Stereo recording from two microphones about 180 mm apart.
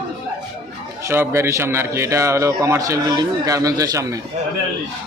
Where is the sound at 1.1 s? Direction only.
15° right (ahead or behind).